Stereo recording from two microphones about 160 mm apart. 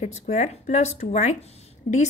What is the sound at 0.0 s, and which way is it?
A woman's voice, 45° left (ahead or behind).